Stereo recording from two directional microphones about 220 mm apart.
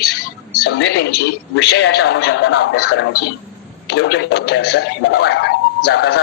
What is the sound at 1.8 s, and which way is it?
Speech, 50° left (ahead or behind).